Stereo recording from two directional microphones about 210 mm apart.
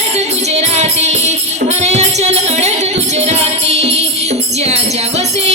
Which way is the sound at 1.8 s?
30° right (ahead or behind).